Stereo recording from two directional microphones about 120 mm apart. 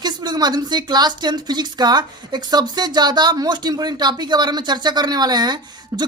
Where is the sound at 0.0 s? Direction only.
35° right (ahead or behind).